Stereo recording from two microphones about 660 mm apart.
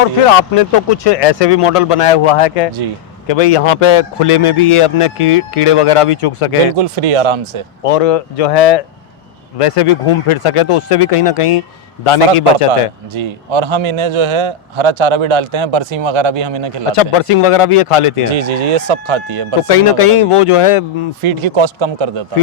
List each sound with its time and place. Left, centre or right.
0.3 s a man's voice: left
6.7 s a man's voice: right
7.9 s a man's voice: left
13.1 s a man's voice: right
16.9 s a man's voice: left
18.3 s a man's voice: right
19.6 s a man's voice: left
21.2 s speech: right